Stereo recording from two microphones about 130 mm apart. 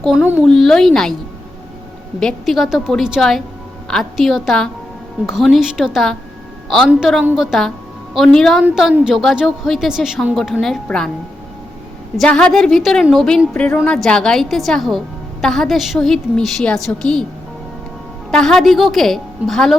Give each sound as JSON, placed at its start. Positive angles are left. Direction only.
{"t": 0.2, "sound": "speech", "side_deg": -10}
{"t": 0.4, "sound": "a woman's voice", "side_deg": 5}
{"t": 2.1, "sound": "a woman's voice", "side_deg": 5}
{"t": 12.1, "sound": "a woman's voice", "side_deg": 5}
{"t": 18.3, "sound": "a woman's voice", "side_deg": 5}